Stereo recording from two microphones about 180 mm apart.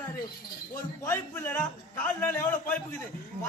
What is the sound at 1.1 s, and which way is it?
A man's voice, 10° left (ahead or behind).